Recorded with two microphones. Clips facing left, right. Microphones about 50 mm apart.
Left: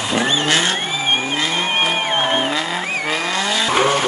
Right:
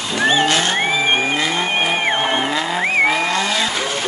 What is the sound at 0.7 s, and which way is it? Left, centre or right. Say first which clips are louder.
Vehicle: right 3 dB; right.